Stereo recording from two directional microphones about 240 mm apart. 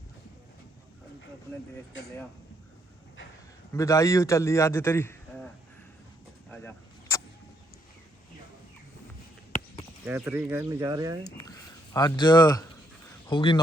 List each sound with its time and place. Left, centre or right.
3.7 s a man's voice: centre
6.5 s vehicle: centre
10.1 s speech: centre
11.3 s speech: centre